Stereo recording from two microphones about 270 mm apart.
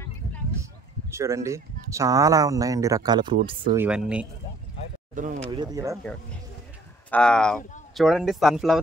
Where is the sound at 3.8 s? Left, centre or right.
Centre.